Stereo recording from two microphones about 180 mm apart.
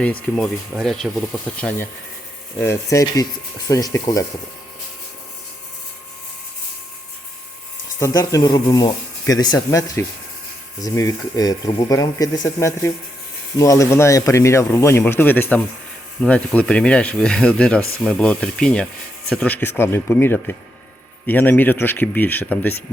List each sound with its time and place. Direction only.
0.0 s a man's voice: 5° left (ahead or behind)
7.9 s a man's voice: 20° left (ahead or behind)